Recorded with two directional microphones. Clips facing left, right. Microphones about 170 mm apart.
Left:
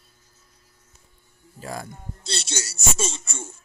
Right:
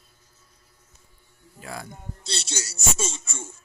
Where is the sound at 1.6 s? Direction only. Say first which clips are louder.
Left 3 dB; 40° left (ahead or behind).